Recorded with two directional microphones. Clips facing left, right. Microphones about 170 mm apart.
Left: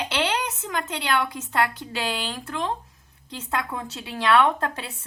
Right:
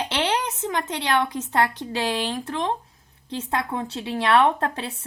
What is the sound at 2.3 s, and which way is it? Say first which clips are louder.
A woman's voice: right 3 dB; 30° right (ahead or behind).